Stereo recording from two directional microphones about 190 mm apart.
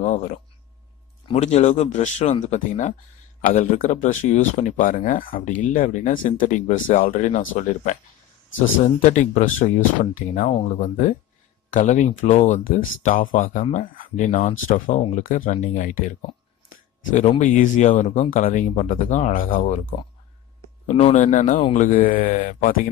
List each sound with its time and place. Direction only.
0.0 s speech: 40° left (ahead or behind)
11.7 s speech: 40° left (ahead or behind)